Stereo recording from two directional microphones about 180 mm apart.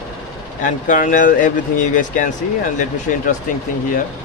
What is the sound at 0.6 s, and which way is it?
Speech, 45° left (ahead or behind).